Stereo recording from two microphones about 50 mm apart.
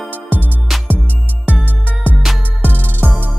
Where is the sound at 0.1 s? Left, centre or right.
Right.